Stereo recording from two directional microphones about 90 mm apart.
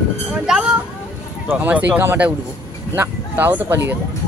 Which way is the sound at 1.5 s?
20° right (ahead or behind).